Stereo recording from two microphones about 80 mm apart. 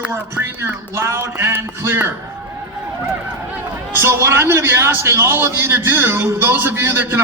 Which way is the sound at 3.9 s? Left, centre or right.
Right.